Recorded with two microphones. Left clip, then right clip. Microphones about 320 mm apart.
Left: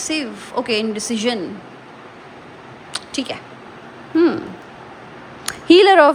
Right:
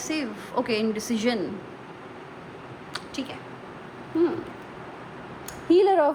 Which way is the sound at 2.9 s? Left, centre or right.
Centre.